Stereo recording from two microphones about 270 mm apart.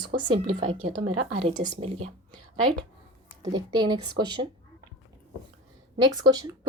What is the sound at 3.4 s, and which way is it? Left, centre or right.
A woman's voice, centre.